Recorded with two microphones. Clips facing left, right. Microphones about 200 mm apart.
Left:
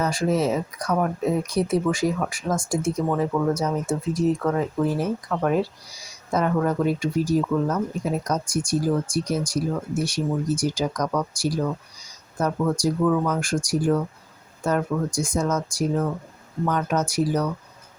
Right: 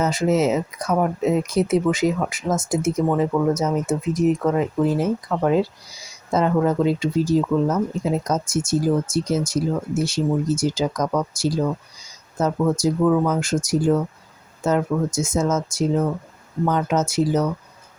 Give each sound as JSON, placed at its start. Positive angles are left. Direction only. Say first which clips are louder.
{"t": 0.0, "sound": "speech", "louder": "right 3 dB", "side_deg": -20}